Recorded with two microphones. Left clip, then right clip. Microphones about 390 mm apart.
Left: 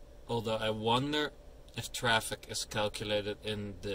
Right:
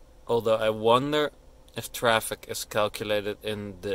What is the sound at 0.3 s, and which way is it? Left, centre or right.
A man's voice, centre.